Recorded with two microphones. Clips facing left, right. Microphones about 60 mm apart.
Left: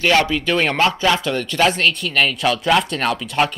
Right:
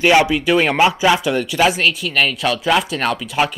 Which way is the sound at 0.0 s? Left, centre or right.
Centre.